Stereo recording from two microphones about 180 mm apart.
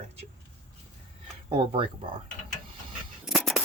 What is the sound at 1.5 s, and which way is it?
Speech, 30° right (ahead or behind).